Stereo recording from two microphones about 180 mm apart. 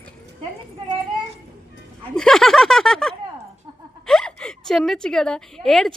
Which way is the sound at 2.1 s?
Centre (ahead or behind).